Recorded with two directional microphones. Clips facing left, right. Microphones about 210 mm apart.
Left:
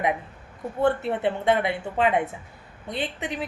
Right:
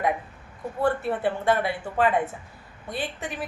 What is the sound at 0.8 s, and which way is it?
A woman's voice, 25° left (ahead or behind).